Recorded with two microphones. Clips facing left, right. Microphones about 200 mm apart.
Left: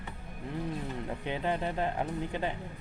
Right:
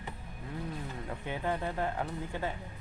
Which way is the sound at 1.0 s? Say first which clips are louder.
Left 1 dB; 20° left (ahead or behind).